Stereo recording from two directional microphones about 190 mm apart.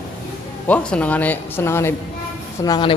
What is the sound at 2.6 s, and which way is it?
Speech, 25° left (ahead or behind).